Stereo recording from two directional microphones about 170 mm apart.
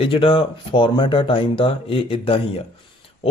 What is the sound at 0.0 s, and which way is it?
Speech, 30° left (ahead or behind).